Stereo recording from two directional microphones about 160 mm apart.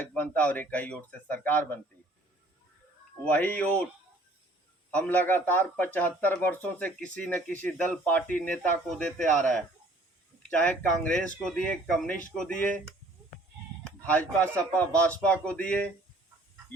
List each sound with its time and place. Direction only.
0.1 s a man's voice: 10° left (ahead or behind)
3.2 s a man's voice: 10° left (ahead or behind)
4.9 s a man's voice: 10° left (ahead or behind)